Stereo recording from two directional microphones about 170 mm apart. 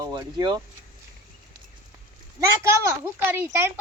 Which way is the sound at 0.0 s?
25° right (ahead or behind).